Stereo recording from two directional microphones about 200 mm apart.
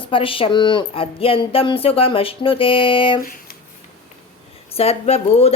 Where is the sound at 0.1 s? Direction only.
25° left (ahead or behind).